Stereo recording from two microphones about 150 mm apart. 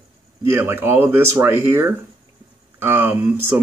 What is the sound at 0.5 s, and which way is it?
Speech, 15° right (ahead or behind).